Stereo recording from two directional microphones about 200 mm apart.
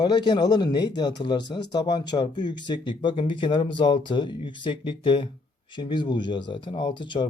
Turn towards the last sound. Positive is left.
turn(degrees=25)  # may be behind; listen again after turning